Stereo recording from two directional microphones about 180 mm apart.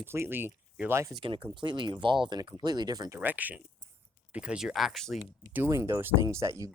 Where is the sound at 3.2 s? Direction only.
10° right (ahead or behind).